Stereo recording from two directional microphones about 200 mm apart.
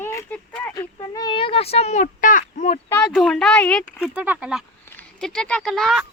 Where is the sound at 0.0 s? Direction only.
15° left (ahead or behind).